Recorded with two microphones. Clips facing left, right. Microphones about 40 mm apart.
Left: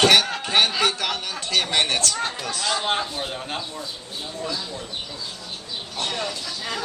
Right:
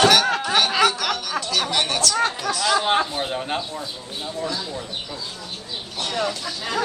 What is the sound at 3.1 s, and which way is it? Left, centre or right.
Speech, centre.